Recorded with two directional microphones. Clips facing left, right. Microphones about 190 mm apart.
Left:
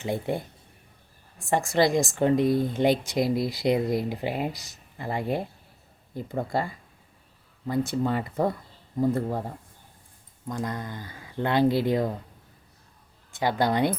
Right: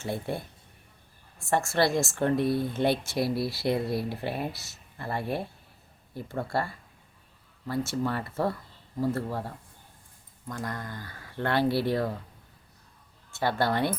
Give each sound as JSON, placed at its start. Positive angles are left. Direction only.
{"t": 0.0, "sound": "speech", "side_deg": 15}
{"t": 1.5, "sound": "speech", "side_deg": 15}
{"t": 10.5, "sound": "speech", "side_deg": 20}
{"t": 13.3, "sound": "speech", "side_deg": 15}